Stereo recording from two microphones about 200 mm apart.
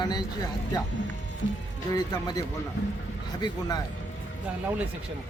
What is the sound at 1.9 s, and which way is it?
Speech, 20° left (ahead or behind).